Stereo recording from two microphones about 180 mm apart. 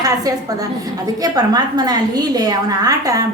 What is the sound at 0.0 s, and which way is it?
A woman's voice, 20° right (ahead or behind).